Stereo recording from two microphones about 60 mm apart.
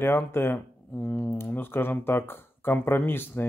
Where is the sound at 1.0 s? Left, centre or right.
Left.